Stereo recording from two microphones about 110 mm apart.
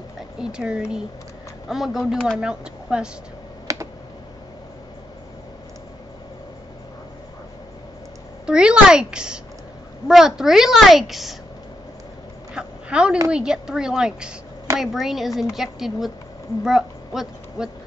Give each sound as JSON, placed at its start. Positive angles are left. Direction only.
{"t": 0.4, "sound": "a woman's voice", "side_deg": -5}
{"t": 3.6, "sound": "computer keyboard", "side_deg": -30}
{"t": 8.5, "sound": "a woman's voice", "side_deg": -10}
{"t": 12.5, "sound": "dog", "side_deg": -10}
{"t": 13.3, "sound": "a woman's voice", "side_deg": -5}